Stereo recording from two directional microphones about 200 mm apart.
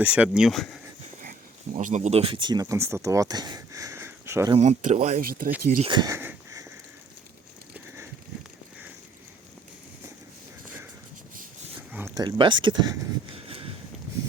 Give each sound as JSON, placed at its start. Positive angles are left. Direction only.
{"t": 0.0, "sound": "speech", "side_deg": -5}
{"t": 1.2, "sound": "speech", "side_deg": -40}
{"t": 4.5, "sound": "speech", "side_deg": -35}
{"t": 5.8, "sound": "a sound", "side_deg": -20}
{"t": 12.1, "sound": "speech", "side_deg": -20}